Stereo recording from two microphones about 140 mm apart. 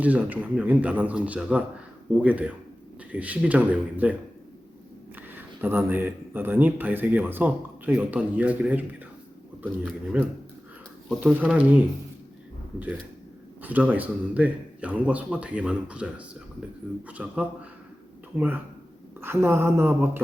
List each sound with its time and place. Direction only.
0.0 s speech: 10° right (ahead or behind)
5.1 s speech: 15° right (ahead or behind)
10.1 s speech: 10° right (ahead or behind)
13.6 s speech: 10° right (ahead or behind)